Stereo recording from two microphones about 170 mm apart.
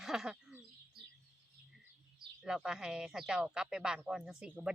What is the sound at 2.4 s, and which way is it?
Speech, 5° right (ahead or behind).